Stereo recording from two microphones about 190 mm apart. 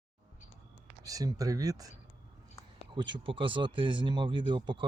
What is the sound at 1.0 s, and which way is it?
Speech, 20° right (ahead or behind).